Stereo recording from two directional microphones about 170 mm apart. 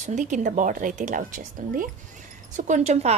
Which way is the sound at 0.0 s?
45° right (ahead or behind).